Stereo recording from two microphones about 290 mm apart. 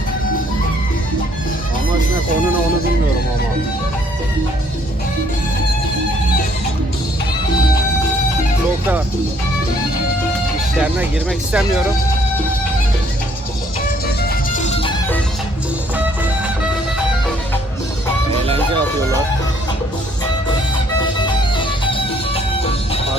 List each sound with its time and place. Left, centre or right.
10.8 s speech: centre
14.2 s music: left
21.2 s music: centre